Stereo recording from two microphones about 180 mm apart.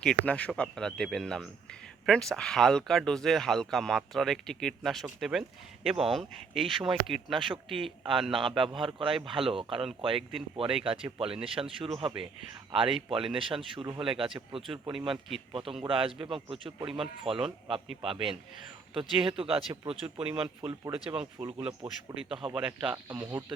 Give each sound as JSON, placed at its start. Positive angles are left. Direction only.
{"t": 0.0, "sound": "speech", "side_deg": 5}
{"t": 7.3, "sound": "speech", "side_deg": -25}
{"t": 7.7, "sound": "speech", "side_deg": 0}
{"t": 8.5, "sound": "speech", "side_deg": -30}
{"t": 10.8, "sound": "speech", "side_deg": -30}
{"t": 21.4, "sound": "speech", "side_deg": -10}
{"t": 21.8, "sound": "speech", "side_deg": -30}
{"t": 22.5, "sound": "speech", "side_deg": -5}